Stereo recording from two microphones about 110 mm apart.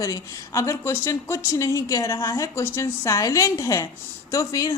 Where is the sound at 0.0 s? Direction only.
30° left (ahead or behind).